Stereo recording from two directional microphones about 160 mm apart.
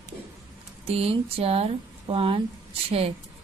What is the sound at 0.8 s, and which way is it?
Speech, 40° right (ahead or behind).